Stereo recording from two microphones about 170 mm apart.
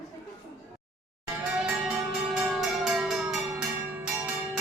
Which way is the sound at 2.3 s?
5° right (ahead or behind).